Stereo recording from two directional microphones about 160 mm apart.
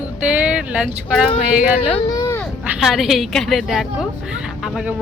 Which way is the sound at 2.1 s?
15° left (ahead or behind).